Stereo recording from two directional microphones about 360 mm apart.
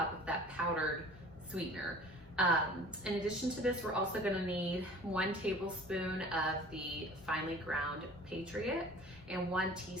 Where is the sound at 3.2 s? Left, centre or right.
Centre.